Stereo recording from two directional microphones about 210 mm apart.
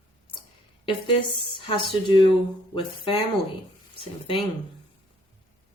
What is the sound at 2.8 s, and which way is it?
Speech, 25° left (ahead or behind).